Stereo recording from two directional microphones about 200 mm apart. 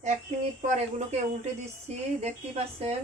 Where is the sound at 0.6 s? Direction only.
35° right (ahead or behind).